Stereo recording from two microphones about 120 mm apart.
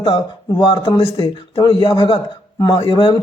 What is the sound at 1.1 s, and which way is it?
Speech, 45° left (ahead or behind).